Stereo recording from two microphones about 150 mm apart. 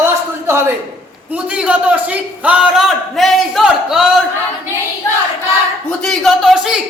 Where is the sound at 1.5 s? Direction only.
5° right (ahead or behind).